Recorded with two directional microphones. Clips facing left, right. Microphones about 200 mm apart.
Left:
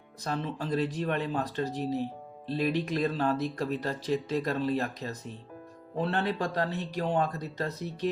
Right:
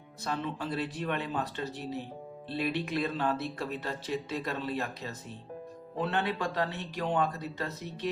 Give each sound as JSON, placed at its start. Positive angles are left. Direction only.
{"t": 0.3, "sound": "speech", "side_deg": 40}